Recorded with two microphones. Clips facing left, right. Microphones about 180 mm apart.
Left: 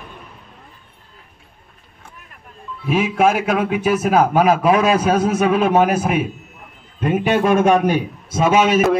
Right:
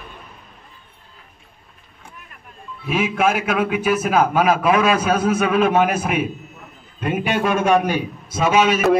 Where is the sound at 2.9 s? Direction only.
35° left (ahead or behind).